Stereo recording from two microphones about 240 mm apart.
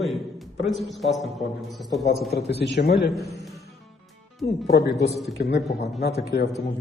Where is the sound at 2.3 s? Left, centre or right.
Left.